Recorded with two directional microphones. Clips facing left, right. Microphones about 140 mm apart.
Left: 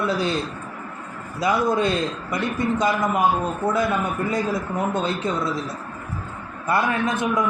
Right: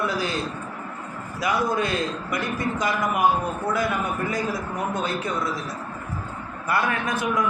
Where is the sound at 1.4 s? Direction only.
25° left (ahead or behind).